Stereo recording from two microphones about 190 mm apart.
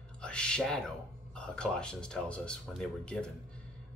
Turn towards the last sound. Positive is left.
turn(degrees=5)  # may be behind; listen again after turning